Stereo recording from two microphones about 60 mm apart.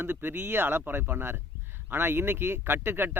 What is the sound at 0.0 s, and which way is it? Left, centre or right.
Speech, right.